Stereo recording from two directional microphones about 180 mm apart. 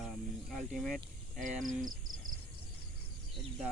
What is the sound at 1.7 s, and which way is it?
Speech, 45° right (ahead or behind).